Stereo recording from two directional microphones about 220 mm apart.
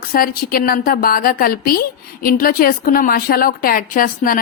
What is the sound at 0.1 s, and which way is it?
A woman's voice, 40° left (ahead or behind).